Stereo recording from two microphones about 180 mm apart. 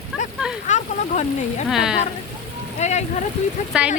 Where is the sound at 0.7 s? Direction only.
40° left (ahead or behind).